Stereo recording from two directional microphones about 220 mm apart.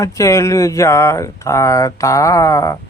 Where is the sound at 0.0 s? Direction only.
15° left (ahead or behind).